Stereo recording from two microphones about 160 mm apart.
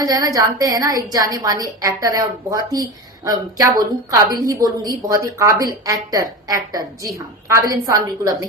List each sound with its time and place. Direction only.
0.0 s a woman's voice: 25° right (ahead or behind)